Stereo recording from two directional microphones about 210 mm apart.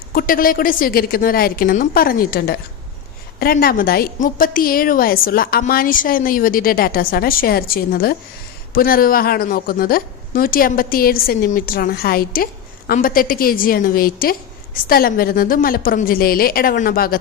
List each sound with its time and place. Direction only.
0.1 s a woman's voice: 45° left (ahead or behind)